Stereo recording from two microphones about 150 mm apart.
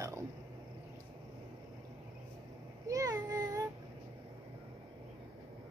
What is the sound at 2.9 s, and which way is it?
Speech, 25° right (ahead or behind).